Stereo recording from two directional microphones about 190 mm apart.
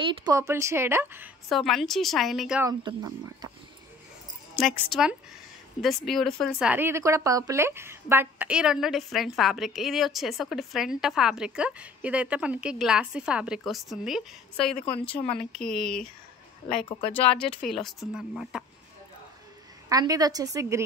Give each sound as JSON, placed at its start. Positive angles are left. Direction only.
{"t": 0.0, "sound": "speech", "side_deg": -25}
{"t": 1.5, "sound": "a woman's voice", "side_deg": 0}
{"t": 2.6, "sound": "a woman's voice", "side_deg": -20}
{"t": 4.6, "sound": "a woman's voice", "side_deg": 0}
{"t": 17.6, "sound": "a woman's voice", "side_deg": 0}
{"t": 19.9, "sound": "a woman's voice", "side_deg": -20}